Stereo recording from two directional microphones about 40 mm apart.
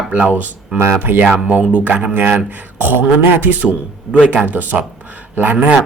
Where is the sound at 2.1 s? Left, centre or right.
Right.